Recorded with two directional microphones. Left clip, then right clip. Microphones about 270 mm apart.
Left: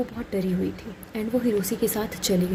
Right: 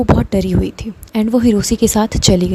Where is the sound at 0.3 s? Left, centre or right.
Right.